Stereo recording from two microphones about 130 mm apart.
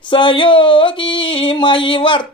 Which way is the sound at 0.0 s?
40° left (ahead or behind).